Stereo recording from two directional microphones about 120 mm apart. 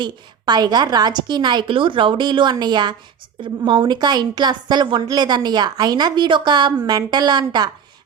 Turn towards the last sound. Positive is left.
turn(degrees=-35)  # may be behind; listen again after turning